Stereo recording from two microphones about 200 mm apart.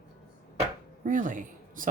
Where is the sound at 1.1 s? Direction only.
40° right (ahead or behind).